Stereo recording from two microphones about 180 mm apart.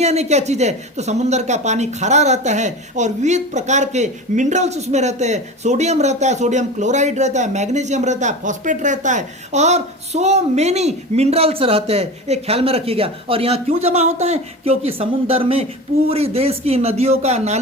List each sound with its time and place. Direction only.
0.0 s speech: 35° right (ahead or behind)